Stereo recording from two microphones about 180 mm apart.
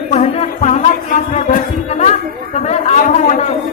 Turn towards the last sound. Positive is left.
turn(degrees=40)  # may be behind; listen again after turning